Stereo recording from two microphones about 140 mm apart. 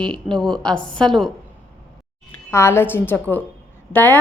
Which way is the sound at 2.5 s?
20° left (ahead or behind).